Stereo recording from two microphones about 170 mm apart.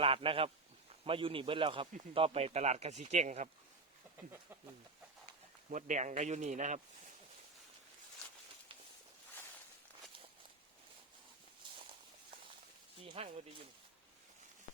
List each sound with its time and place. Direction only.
0.0 s speech: 35° right (ahead or behind)
5.7 s speech: 45° right (ahead or behind)
13.1 s speech: 35° right (ahead or behind)